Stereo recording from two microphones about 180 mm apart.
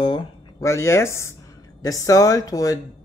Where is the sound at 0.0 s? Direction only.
25° left (ahead or behind).